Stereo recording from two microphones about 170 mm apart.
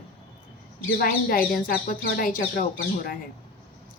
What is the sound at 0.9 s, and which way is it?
Speech, 60° left (ahead or behind).